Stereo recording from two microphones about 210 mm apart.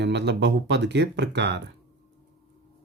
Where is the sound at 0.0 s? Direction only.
55° right (ahead or behind).